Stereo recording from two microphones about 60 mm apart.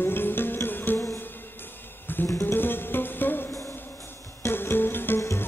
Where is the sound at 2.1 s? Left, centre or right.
Left.